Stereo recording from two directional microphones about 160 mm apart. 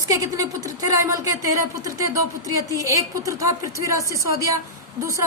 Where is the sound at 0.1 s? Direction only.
20° right (ahead or behind).